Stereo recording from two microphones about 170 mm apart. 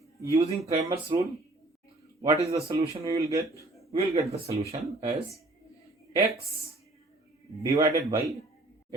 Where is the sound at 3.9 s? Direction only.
35° right (ahead or behind).